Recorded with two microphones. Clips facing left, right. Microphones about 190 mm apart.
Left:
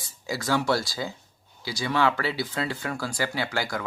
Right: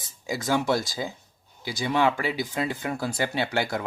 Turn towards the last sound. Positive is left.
turn(degrees=-25)  # may be behind; listen again after turning